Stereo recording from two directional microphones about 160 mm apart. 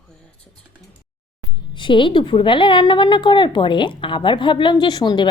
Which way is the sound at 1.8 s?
30° left (ahead or behind).